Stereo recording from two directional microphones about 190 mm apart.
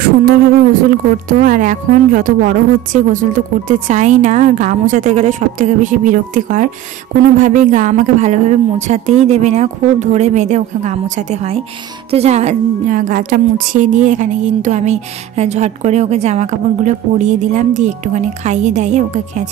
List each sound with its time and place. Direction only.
0.0 s a woman's voice: 50° right (ahead or behind)